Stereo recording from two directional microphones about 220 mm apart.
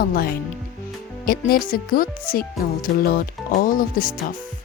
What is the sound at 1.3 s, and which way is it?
A woman's voice, 40° left (ahead or behind).